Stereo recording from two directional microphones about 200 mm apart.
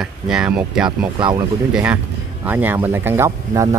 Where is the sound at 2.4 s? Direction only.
10° right (ahead or behind).